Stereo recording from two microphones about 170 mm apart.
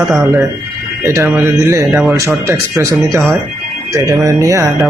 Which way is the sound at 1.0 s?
15° right (ahead or behind).